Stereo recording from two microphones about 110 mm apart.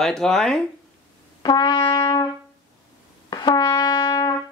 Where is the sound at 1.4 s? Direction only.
45° left (ahead or behind).